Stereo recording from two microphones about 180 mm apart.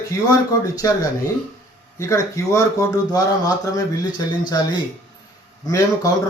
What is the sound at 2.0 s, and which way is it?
Speech, 15° left (ahead or behind).